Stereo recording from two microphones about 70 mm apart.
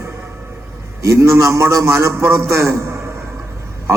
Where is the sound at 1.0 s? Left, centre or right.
Right.